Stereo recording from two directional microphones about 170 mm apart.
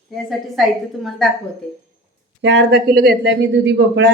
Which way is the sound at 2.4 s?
90° right.